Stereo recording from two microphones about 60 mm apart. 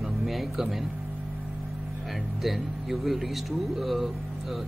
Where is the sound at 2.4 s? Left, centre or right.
Centre.